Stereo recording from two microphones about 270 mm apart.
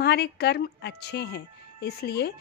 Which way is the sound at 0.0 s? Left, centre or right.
Left.